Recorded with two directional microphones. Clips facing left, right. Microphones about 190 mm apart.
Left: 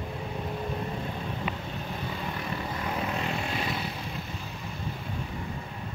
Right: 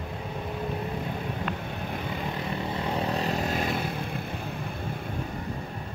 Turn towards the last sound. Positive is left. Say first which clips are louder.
# right 4 dB
turn(degrees=-50)  # may be behind; listen again after turning